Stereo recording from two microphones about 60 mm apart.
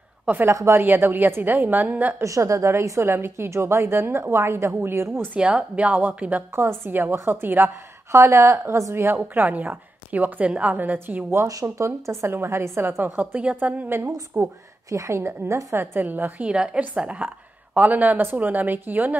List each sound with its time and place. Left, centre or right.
0.3 s speech: right
0.7 s a woman's voice: right
2.2 s a woman's voice: right
5.4 s speech: centre
6.7 s a woman's voice: right
8.5 s a woman's voice: right
9.3 s a woman's voice: right
11.8 s a woman's voice: right
14.3 s a woman's voice: right
14.9 s a woman's voice: right
16.0 s speech: right
16.3 s a woman's voice: centre; by 19.1 s right